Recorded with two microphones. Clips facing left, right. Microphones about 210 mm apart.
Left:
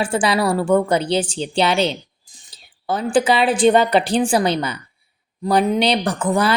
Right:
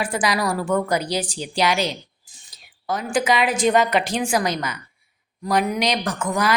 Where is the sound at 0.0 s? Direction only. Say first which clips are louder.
Left 4 dB; 30° left (ahead or behind).